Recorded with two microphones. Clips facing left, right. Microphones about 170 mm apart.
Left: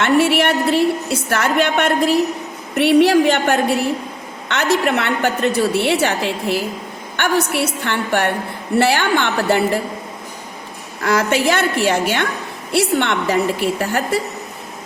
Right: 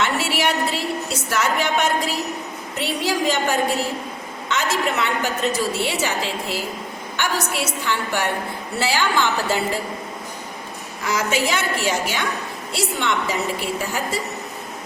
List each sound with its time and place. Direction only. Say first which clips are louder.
0.0 s a woman's voice: left 7 dB; 60° left (ahead or behind)
11.0 s a woman's voice: left 6 dB; 65° left (ahead or behind)